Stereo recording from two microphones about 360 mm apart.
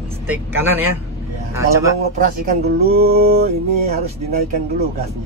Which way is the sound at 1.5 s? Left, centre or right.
Centre.